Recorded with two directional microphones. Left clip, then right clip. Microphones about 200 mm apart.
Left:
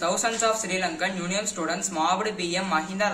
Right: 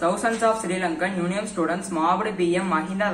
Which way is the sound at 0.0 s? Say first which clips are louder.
Right 3 dB; 15° left (ahead or behind).